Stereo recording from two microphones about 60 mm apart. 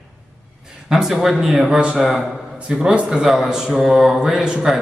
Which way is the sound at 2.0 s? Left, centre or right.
Centre.